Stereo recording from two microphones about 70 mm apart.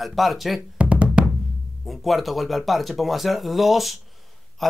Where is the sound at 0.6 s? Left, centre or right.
Centre.